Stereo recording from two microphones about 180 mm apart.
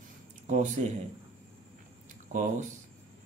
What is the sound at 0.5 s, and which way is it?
Speech, 45° right (ahead or behind).